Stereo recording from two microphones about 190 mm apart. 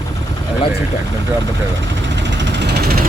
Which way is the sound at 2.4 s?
65° right (ahead or behind).